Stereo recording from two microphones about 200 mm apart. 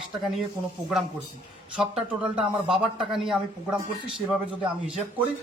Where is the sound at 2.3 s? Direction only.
Centre (ahead or behind).